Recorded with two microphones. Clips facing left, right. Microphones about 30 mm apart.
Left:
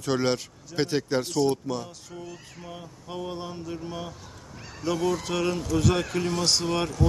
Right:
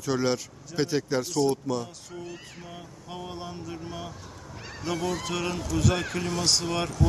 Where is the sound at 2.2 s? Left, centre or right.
Centre.